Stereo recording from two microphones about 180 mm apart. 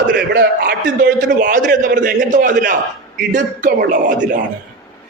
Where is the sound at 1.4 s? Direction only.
45° right (ahead or behind).